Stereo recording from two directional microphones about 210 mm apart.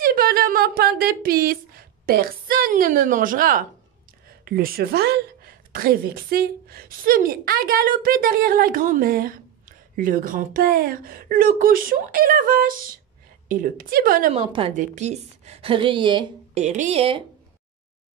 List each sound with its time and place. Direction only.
0.0 s a woman's voice: 45° right (ahead or behind)
14.3 s a woman's voice: 25° right (ahead or behind)